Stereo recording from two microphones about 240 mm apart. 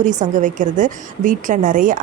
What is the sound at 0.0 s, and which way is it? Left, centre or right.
A woman's voice, right.